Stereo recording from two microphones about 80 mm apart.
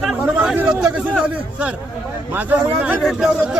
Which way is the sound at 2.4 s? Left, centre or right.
Right.